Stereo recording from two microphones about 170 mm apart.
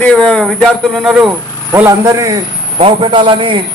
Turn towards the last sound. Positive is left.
turn(degrees=-30)  # may be behind; listen again after turning